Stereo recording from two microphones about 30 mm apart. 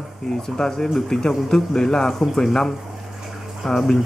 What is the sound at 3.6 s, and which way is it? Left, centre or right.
Speech, centre.